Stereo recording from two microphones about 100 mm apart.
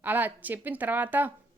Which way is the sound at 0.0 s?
20° right (ahead or behind).